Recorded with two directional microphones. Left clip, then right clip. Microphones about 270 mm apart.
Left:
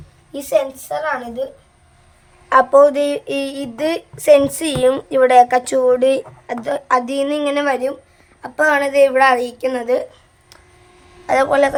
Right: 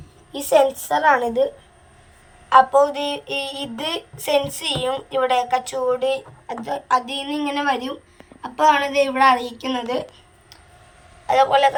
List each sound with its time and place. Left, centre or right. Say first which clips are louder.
0.5 s a woman's voice: right 2 dB; centre
2.5 s a sound: left 3 dB; centre
11.3 s a woman's voice: left 1 dB; centre